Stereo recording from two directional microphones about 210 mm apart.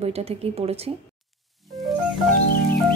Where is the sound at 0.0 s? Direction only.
30° right (ahead or behind).